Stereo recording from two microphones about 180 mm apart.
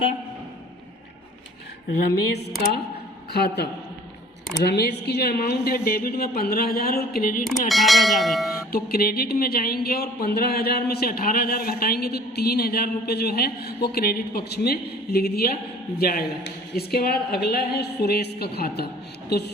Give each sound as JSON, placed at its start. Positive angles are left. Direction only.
{"t": 3.3, "sound": "speech", "side_deg": 60}
{"t": 7.7, "sound": "speech", "side_deg": 0}
{"t": 8.7, "sound": "speech", "side_deg": 55}